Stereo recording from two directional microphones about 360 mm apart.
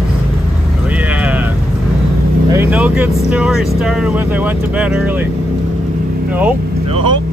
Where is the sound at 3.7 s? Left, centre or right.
Centre.